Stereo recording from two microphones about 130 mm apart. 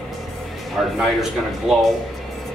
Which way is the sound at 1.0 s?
Centre (ahead or behind).